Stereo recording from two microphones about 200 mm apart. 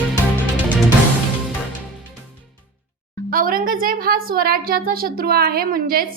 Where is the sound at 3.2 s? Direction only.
45° right (ahead or behind).